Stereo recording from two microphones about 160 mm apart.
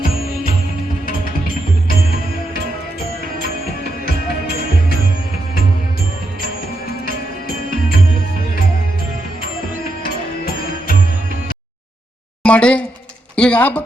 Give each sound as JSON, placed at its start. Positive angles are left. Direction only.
{"t": 7.0, "sound": "music", "side_deg": 65}
{"t": 12.4, "sound": "a woman's voice", "side_deg": 5}